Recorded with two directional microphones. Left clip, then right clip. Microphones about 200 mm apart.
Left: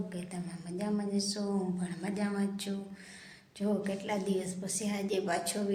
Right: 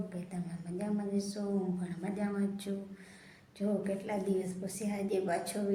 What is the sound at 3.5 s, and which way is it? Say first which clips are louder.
A woman's voice: left 1 dB; 5° right (ahead or behind).